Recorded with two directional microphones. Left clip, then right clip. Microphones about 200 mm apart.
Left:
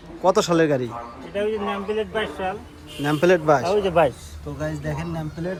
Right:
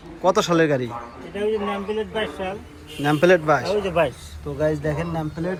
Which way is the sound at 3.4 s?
20° left (ahead or behind).